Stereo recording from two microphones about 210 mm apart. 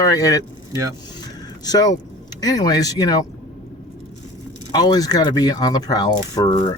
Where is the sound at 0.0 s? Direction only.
15° left (ahead or behind).